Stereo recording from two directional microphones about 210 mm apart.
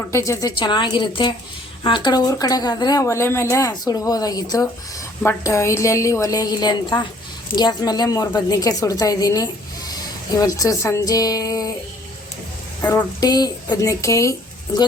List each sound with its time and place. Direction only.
0.1 s a woman's voice: 15° left (ahead or behind)
12.8 s a woman's voice: 10° left (ahead or behind)